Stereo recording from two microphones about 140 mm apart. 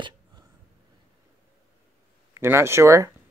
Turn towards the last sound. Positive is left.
turn(degrees=-20)  # may be behind; listen again after turning